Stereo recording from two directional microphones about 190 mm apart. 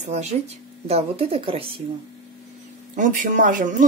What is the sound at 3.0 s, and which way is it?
Speech, 45° right (ahead or behind).